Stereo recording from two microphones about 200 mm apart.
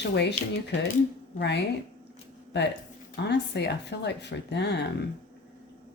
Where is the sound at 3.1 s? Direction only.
55° left (ahead or behind).